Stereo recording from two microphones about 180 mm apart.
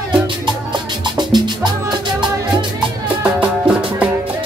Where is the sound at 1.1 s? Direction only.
25° right (ahead or behind).